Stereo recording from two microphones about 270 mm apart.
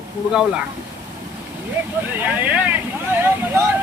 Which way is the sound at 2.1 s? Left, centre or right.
Centre.